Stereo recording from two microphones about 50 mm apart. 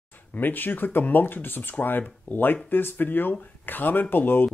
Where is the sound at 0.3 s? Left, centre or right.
Left.